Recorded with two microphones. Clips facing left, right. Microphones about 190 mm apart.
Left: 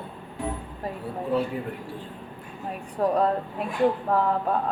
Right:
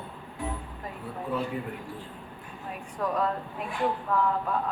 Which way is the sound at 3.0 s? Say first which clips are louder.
Left 6 dB; 35° left (ahead or behind).